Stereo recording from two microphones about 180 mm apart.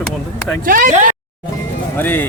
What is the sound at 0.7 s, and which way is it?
Speech, 50° right (ahead or behind).